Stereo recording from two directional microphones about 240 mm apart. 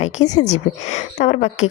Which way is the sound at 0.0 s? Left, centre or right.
Left.